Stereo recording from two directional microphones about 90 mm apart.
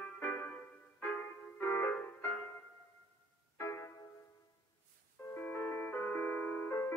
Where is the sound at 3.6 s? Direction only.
30° left (ahead or behind).